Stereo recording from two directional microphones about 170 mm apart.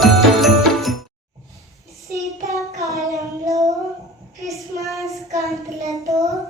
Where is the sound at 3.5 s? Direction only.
20° right (ahead or behind).